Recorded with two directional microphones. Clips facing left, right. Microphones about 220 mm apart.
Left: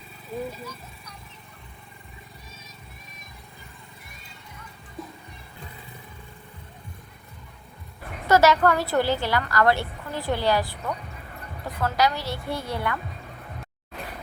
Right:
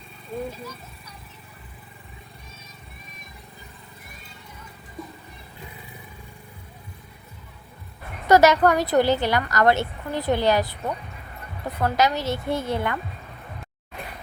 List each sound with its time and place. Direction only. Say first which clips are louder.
0.3 s speech: right 1 dB; centre (ahead or behind)
8.3 s a woman's voice: right 3 dB; 20° right (ahead or behind)